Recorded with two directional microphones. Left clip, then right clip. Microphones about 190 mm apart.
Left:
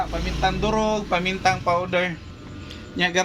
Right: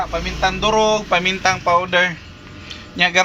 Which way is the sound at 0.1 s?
15° right (ahead or behind).